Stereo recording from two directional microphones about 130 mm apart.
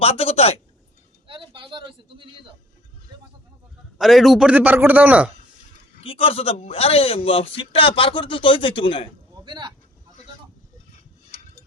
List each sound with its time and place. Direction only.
0.0 s speech: 50° left (ahead or behind)
1.3 s a sound: 40° right (ahead or behind)
3.9 s a man's voice: centre (ahead or behind)
6.0 s a man's voice: 45° left (ahead or behind)
9.4 s vehicle: 35° right (ahead or behind)